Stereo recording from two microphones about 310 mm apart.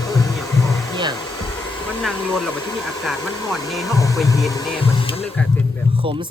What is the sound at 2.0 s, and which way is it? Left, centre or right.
Speech, centre.